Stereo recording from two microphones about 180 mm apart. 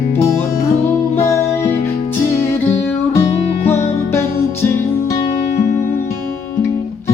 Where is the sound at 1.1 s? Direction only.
15° left (ahead or behind).